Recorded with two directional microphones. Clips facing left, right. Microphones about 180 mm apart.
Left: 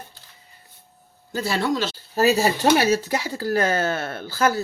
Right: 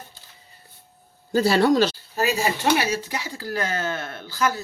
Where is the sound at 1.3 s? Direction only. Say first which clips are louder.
Right 6 dB; 35° right (ahead or behind).